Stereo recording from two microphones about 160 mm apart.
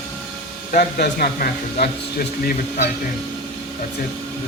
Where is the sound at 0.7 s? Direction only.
80° left.